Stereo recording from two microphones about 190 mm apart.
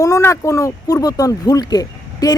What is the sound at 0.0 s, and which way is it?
A woman's voice, 15° left (ahead or behind).